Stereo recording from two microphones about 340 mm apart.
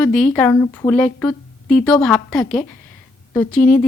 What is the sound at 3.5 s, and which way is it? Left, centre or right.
Speech, left.